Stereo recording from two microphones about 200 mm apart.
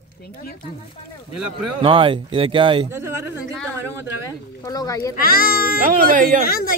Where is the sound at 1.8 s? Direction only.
25° right (ahead or behind).